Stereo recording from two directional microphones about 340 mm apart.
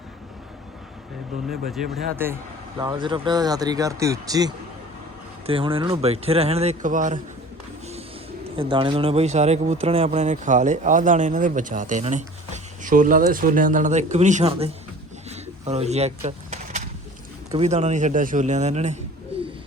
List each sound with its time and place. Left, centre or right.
1.7 s speech: centre
2.7 s speech: centre
8.5 s speech: centre
15.3 s pigeon: centre
17.5 s speech: centre